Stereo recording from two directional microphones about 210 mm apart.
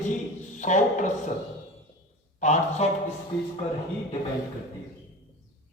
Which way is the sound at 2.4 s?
35° left (ahead or behind).